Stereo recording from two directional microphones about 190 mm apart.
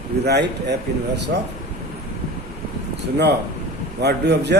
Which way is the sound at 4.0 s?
60° right (ahead or behind).